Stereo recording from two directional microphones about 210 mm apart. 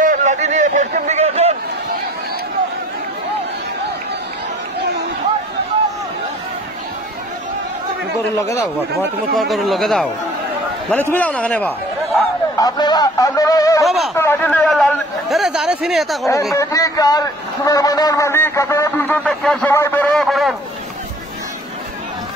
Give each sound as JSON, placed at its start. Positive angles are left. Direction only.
{"t": 0.0, "sound": "a sound", "side_deg": -35}
{"t": 9.4, "sound": "a man's voice", "side_deg": 0}
{"t": 12.5, "sound": "a man's voice", "side_deg": 20}
{"t": 13.8, "sound": "speech", "side_deg": 0}
{"t": 14.1, "sound": "a man's voice", "side_deg": 10}
{"t": 16.5, "sound": "a man's voice", "side_deg": 15}